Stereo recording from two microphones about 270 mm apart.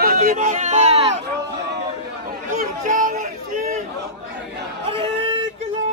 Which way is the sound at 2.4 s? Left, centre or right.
Right.